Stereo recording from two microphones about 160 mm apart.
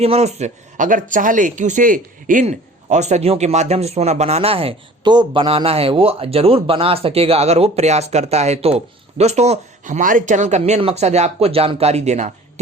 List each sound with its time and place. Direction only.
0.0 s speech: 40° right (ahead or behind)